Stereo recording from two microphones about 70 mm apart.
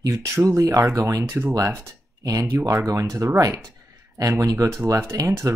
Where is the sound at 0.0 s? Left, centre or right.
Right.